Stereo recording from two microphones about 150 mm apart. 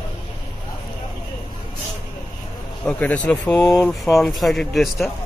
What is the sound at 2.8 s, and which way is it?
Speech, 10° left (ahead or behind).